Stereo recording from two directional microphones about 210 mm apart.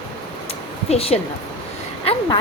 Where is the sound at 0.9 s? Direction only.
30° left (ahead or behind).